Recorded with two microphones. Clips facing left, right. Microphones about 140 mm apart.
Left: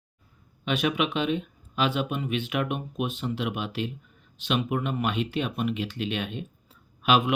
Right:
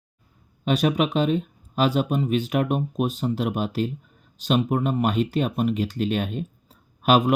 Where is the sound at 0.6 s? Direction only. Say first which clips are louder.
Right 5 dB; 40° right (ahead or behind).